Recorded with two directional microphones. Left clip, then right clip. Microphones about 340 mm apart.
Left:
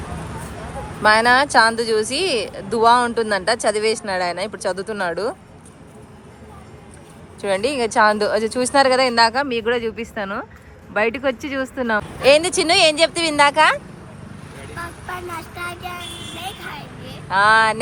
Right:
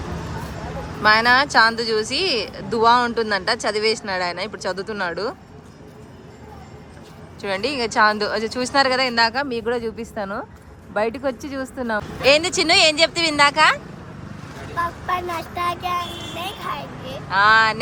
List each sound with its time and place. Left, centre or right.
1.0 s speech: centre
7.4 s speech: centre
14.8 s vehicle: right
17.2 s speech: centre